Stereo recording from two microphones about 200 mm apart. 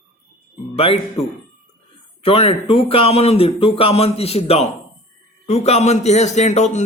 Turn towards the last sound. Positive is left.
turn(degrees=35)  # may be behind; listen again after turning